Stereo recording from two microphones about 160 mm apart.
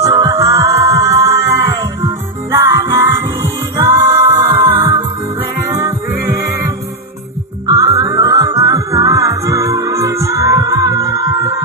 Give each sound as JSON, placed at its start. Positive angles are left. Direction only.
{"t": 0.0, "sound": "music", "side_deg": -20}